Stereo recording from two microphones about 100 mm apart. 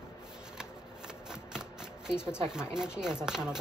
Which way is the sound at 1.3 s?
5° right (ahead or behind).